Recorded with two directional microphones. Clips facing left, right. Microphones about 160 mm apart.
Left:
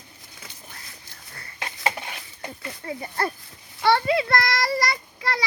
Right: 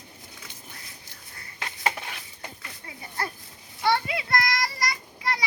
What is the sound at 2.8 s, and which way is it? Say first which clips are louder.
A child's voice: left 6 dB; 60° left (ahead or behind).